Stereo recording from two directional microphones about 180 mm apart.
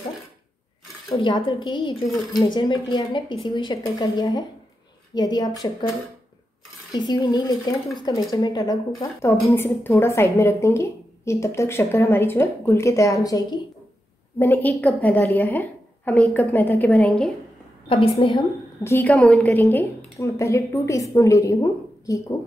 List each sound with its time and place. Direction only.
1.0 s a woman's voice: 25° left (ahead or behind)
6.9 s a woman's voice: 25° left (ahead or behind)
14.4 s a woman's voice: 10° left (ahead or behind)
17.8 s a woman's voice: 35° left (ahead or behind)
18.9 s a woman's voice: 10° left (ahead or behind)